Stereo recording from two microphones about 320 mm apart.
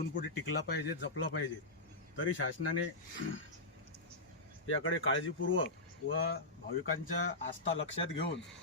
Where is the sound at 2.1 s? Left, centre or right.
Left.